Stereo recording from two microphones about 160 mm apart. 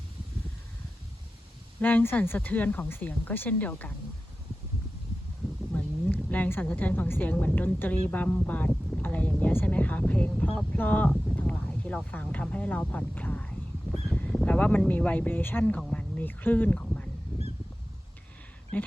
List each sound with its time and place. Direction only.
1.8 s speech: 10° left (ahead or behind)
5.7 s a woman's voice: 10° left (ahead or behind)
18.7 s speech: 10° left (ahead or behind)